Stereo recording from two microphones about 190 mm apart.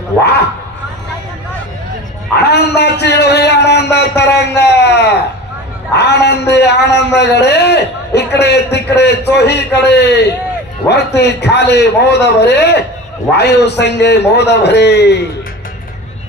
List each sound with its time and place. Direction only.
2.4 s a man's voice: 60° left (ahead or behind)